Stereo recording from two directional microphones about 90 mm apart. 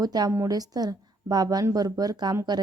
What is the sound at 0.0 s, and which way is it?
A woman's voice, 45° right (ahead or behind).